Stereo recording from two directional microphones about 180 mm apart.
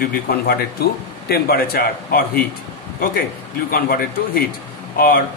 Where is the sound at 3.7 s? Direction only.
55° left (ahead or behind).